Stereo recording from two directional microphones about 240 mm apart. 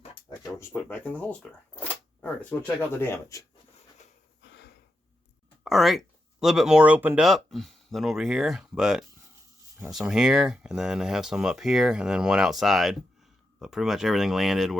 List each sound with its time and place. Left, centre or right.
0.0 s a sound: left
0.6 s speech: centre
5.6 s speech: centre